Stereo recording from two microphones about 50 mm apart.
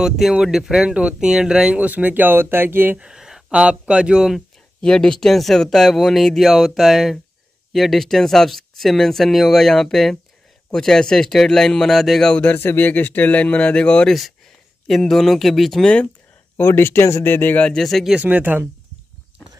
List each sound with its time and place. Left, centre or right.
0.0 s speech: centre
1.8 s speech: right
3.0 s a sound: centre
3.5 s a man's voice: right
4.8 s speech: centre
12.5 s speech: left
14.0 s speech: centre
15.8 s speech: left
16.5 s speech: left
17.7 s speech: centre
18.2 s speech: right